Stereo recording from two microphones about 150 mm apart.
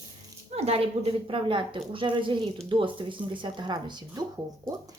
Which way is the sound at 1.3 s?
35° right (ahead or behind).